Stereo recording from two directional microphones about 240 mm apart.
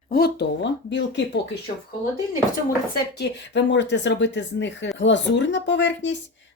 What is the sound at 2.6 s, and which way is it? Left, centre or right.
Speech, left.